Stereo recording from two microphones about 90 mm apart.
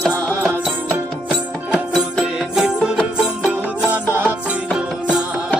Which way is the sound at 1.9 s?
Centre (ahead or behind).